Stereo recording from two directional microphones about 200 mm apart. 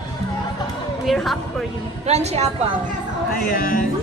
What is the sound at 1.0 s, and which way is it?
Speech, centre (ahead or behind).